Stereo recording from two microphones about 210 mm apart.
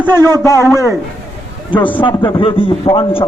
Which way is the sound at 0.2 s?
20° right (ahead or behind).